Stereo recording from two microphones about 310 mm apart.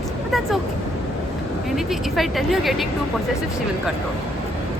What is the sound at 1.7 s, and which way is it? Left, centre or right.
A woman's voice, centre.